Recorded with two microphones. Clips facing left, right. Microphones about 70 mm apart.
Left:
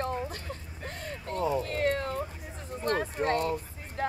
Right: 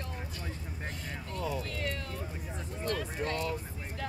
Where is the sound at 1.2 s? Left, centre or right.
Left.